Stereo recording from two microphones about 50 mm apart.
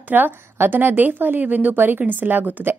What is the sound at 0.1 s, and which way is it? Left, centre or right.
A woman's voice, right.